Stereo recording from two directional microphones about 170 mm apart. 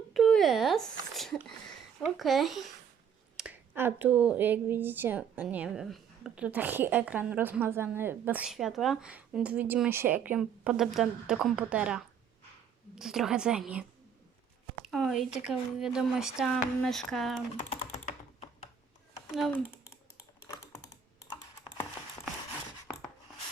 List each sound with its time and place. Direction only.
0.1 s speech: centre (ahead or behind)
14.8 s speech: centre (ahead or behind)
17.9 s computer keyboard: 50° left (ahead or behind)